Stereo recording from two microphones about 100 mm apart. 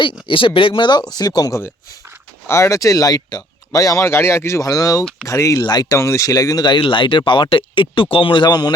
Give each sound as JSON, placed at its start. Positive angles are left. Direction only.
{"t": 0.3, "sound": "speech", "side_deg": 60}
{"t": 2.5, "sound": "speech", "side_deg": 30}
{"t": 6.0, "sound": "speech", "side_deg": 30}